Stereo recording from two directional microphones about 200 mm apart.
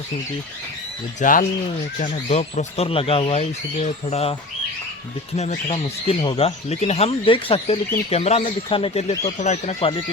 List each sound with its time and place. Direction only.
1.2 s speech: 40° left (ahead or behind)
5.4 s speech: 30° left (ahead or behind)